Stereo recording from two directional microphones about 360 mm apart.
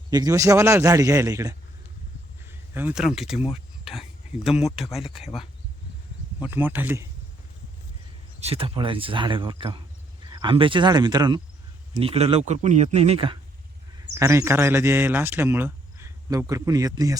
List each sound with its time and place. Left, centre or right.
0.1 s speech: centre
2.5 s a sound: centre
3.3 s speech: centre
4.8 s speech: centre
6.4 s speech: centre
8.4 s speech: centre